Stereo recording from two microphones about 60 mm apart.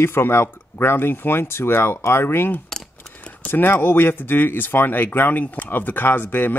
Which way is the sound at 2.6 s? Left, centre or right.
Centre.